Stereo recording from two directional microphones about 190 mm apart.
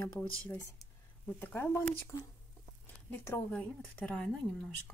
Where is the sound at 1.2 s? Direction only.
10° left (ahead or behind).